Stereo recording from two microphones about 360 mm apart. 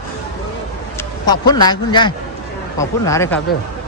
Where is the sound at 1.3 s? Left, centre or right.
Centre.